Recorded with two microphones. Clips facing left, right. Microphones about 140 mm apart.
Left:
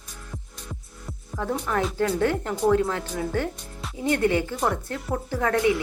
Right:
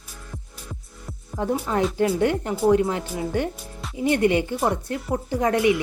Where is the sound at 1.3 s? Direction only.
20° right (ahead or behind).